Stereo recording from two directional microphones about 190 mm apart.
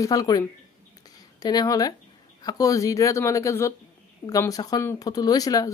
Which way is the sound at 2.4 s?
20° left (ahead or behind).